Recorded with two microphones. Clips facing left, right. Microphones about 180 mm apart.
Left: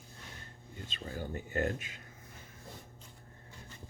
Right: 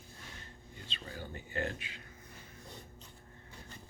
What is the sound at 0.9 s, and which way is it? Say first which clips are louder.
Speech: left 5 dB; 45° left (ahead or behind).